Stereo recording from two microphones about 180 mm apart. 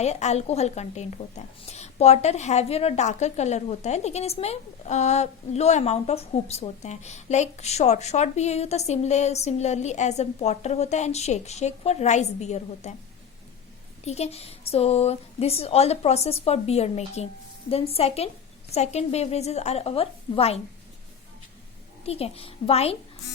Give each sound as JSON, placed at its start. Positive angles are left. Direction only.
{"t": 0.0, "sound": "a woman's voice", "side_deg": 40}
{"t": 14.0, "sound": "a woman's voice", "side_deg": 35}
{"t": 22.0, "sound": "a woman's voice", "side_deg": 35}